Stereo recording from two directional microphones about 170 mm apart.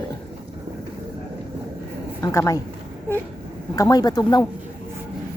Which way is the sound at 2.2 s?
20° left (ahead or behind).